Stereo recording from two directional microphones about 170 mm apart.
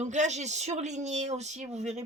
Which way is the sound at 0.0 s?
45° right (ahead or behind).